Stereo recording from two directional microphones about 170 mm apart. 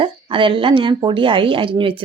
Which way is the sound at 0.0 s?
30° right (ahead or behind).